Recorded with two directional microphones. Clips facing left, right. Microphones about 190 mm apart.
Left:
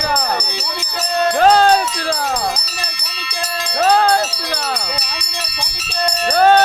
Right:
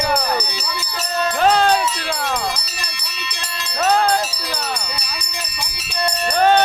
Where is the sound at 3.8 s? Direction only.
35° left (ahead or behind).